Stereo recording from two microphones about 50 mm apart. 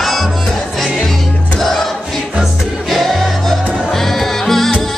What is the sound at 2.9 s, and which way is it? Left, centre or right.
Music, centre.